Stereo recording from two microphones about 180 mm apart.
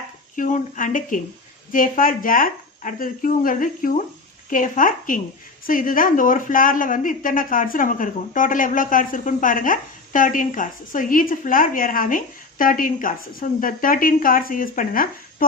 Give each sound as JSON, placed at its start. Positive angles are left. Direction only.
{"t": 0.3, "sound": "a woman's voice", "side_deg": 45}